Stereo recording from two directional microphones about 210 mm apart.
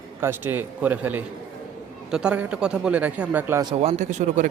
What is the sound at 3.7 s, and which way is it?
Speech, 30° right (ahead or behind).